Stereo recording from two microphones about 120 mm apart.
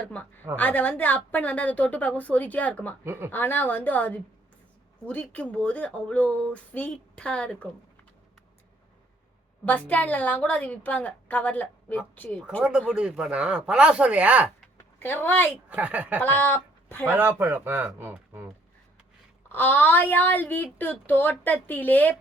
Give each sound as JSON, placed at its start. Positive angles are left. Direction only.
{"t": 0.5, "sound": "speech", "side_deg": 15}
{"t": 3.0, "sound": "speech", "side_deg": -20}
{"t": 3.3, "sound": "speech", "side_deg": 15}
{"t": 9.6, "sound": "speech", "side_deg": 10}
{"t": 12.9, "sound": "speech", "side_deg": -5}
{"t": 14.8, "sound": "a woman's voice", "side_deg": 15}
{"t": 15.7, "sound": "speech", "side_deg": -10}
{"t": 16.2, "sound": "speech", "side_deg": 15}
{"t": 17.1, "sound": "speech", "side_deg": -15}
{"t": 19.5, "sound": "speech", "side_deg": 15}